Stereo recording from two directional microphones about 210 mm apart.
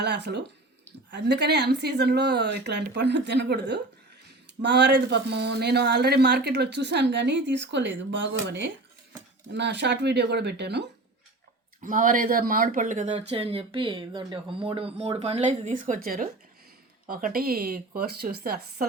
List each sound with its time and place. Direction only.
0.0 s speech: 55° right (ahead or behind)
11.8 s speech: 40° right (ahead or behind)